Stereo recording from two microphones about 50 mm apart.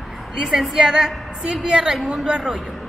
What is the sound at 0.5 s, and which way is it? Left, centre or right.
A woman's voice, centre.